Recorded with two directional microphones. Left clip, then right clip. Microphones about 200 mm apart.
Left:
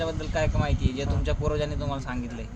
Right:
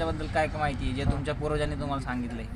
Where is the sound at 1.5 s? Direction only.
25° left (ahead or behind).